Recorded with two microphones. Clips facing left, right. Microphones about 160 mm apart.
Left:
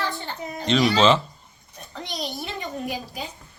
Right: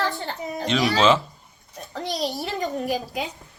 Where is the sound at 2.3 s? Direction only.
40° right (ahead or behind).